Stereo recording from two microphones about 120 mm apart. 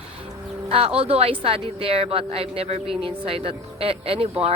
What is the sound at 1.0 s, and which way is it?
A woman's voice, 55° right (ahead or behind).